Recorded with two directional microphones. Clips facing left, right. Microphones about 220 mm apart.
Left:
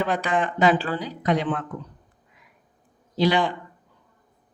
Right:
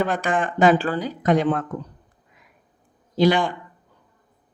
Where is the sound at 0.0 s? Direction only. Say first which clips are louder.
Right 1 dB; 50° right (ahead or behind).